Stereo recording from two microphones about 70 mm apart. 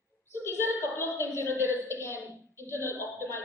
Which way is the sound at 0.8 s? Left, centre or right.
Left.